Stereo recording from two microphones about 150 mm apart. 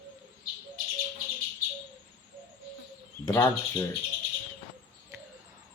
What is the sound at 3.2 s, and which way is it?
Speech, 15° left (ahead or behind).